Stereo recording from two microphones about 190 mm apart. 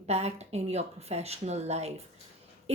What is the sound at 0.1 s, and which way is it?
Speech, 35° right (ahead or behind).